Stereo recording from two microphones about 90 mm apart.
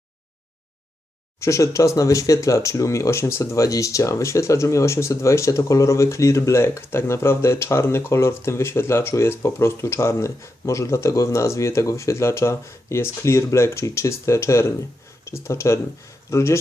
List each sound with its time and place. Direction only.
1.4 s speech: 35° left (ahead or behind)